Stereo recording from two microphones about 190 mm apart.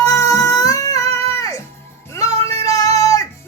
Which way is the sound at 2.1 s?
15° left (ahead or behind).